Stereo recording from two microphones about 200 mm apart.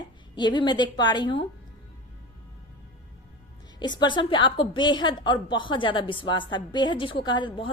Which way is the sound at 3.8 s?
20° left (ahead or behind).